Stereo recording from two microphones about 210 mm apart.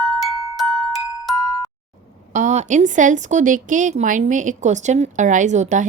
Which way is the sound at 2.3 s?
35° right (ahead or behind).